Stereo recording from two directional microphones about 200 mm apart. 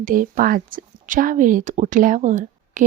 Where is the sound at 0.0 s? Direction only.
45° right (ahead or behind).